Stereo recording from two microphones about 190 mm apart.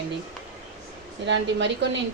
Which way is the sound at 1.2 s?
70° right (ahead or behind).